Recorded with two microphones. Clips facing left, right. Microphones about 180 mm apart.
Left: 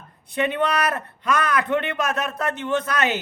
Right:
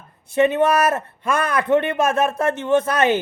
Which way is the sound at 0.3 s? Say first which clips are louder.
Right 6 dB; 25° right (ahead or behind).